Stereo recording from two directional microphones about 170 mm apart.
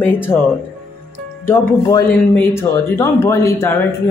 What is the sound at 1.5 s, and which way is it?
A woman's voice, 20° left (ahead or behind).